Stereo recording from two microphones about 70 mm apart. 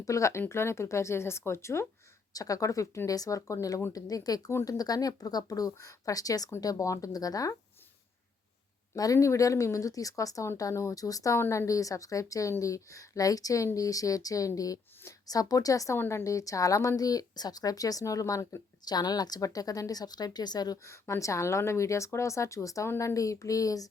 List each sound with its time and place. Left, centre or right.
0.0 s speech: left
2.3 s a woman's voice: left
3.9 s speech: left
9.1 s a woman's voice: left
11.3 s a woman's voice: left
16.0 s a woman's voice: left
18.9 s a woman's voice: left
20.8 s a woman's voice: left